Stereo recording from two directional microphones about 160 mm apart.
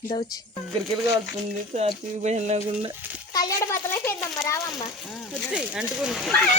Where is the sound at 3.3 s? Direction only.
25° left (ahead or behind).